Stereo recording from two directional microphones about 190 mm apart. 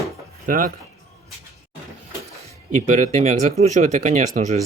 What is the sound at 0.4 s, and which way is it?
Speech, 45° right (ahead or behind).